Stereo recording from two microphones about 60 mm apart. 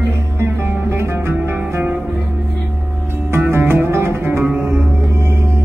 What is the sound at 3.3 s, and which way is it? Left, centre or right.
Music, right.